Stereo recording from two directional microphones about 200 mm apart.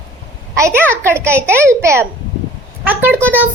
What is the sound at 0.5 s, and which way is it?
A child's voice, 15° right (ahead or behind).